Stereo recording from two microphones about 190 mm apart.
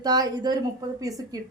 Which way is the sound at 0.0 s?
20° right (ahead or behind).